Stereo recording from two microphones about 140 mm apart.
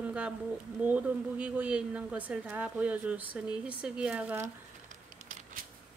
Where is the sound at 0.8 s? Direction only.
10° right (ahead or behind).